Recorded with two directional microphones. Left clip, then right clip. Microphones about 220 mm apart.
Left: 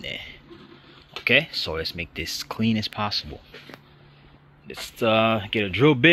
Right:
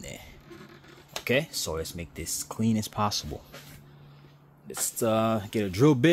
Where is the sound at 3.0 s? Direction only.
30° right (ahead or behind).